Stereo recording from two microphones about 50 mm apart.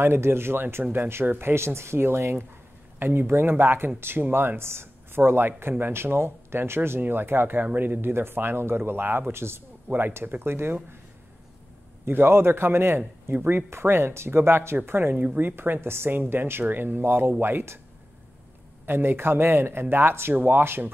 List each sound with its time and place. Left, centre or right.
0.0 s speech: right
9.3 s speech: right
12.0 s speech: right
13.7 s speech: right
15.1 s speech: right
15.4 s speech: right
18.9 s speech: right
20.3 s speech: right
20.6 s speech: right